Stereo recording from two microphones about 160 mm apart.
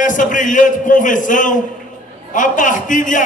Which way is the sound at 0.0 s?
55° left (ahead or behind).